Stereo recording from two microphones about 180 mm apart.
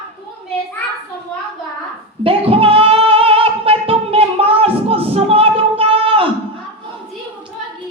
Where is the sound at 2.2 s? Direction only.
30° right (ahead or behind).